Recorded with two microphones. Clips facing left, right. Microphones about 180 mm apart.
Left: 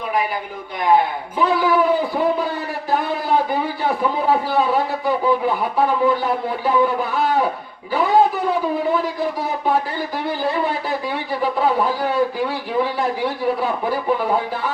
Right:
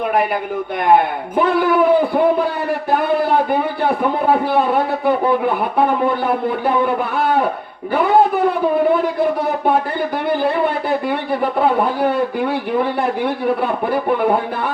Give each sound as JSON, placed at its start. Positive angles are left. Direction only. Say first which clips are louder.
{"t": 0.9, "sound": "a man's voice", "louder": "right 2 dB", "side_deg": -55}
{"t": 11.3, "sound": "a man's voice", "louder": "right 2 dB", "side_deg": -60}